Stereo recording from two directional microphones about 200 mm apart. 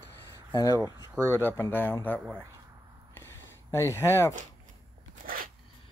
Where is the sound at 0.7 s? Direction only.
15° right (ahead or behind).